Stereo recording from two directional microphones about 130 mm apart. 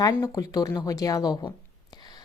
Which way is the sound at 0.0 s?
25° left (ahead or behind).